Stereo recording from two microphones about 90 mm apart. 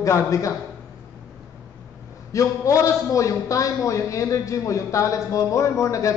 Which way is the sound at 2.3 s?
35° left (ahead or behind).